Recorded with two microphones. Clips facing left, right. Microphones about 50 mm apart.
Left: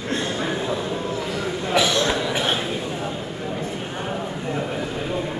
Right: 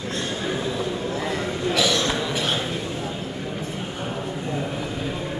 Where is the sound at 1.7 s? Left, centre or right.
Left.